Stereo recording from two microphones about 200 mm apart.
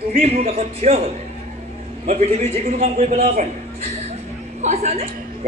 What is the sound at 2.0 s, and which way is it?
A woman's voice, 35° right (ahead or behind).